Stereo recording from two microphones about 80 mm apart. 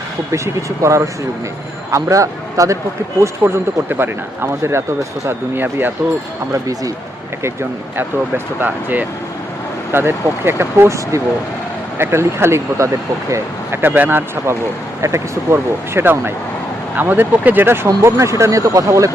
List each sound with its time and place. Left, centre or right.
0.3 s speech: right
3.2 s speech: right
6.5 s speech: right
8.6 s speech: right
15.0 s speech: right
17.8 s speech: right